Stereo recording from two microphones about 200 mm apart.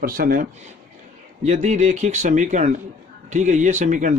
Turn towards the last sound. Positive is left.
turn(degrees=-40)  # may be behind; listen again after turning